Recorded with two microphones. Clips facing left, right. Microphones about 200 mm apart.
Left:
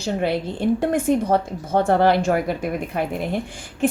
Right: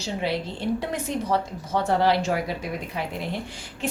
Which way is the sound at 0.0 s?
50° left (ahead or behind).